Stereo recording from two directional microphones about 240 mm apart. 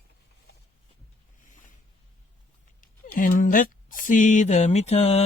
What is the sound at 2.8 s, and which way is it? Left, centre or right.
Speech, left.